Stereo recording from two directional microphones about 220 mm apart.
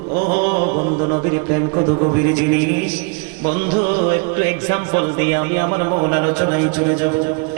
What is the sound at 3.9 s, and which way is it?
Speech, 20° right (ahead or behind).